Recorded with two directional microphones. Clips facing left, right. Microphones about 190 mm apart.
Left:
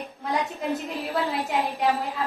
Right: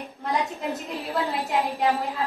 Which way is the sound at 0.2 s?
Centre (ahead or behind).